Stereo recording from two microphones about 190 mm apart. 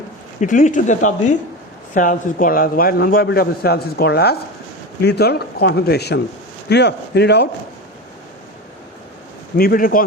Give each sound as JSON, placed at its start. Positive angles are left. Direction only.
{"t": 0.3, "sound": "a man's voice", "side_deg": 40}
{"t": 9.6, "sound": "a man's voice", "side_deg": 50}